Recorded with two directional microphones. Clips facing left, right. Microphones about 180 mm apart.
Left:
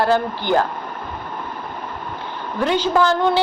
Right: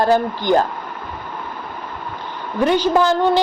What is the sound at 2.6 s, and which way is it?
Speech, 15° right (ahead or behind).